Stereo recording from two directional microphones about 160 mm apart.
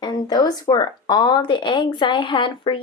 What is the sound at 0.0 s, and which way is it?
Speech, 25° left (ahead or behind).